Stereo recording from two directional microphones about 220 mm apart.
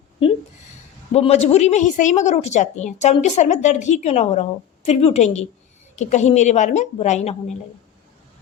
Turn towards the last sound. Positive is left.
turn(degrees=30)  # may be behind; listen again after turning